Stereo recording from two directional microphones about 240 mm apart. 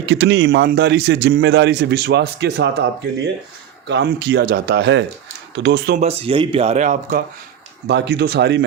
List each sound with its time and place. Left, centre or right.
0.0 s a man's voice: right
6.0 s speech: right
7.9 s a man's voice: right